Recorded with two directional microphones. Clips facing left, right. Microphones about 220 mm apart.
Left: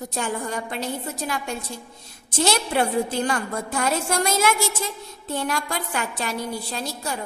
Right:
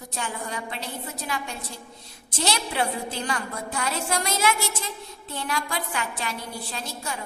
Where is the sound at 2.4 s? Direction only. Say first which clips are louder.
Left 5 dB; 50° left (ahead or behind).